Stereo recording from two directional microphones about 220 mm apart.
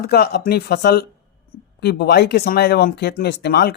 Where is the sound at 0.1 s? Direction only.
45° left (ahead or behind).